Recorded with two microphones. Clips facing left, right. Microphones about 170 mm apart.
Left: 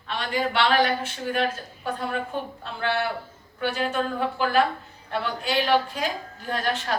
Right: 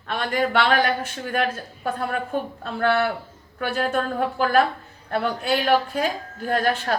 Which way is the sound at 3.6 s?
45° right (ahead or behind).